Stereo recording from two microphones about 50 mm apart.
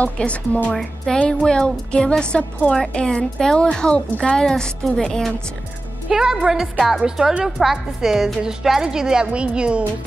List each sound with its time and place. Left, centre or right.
0.0 s a woman's voice: left
0.7 s a woman's voice: centre
6.0 s a woman's voice: centre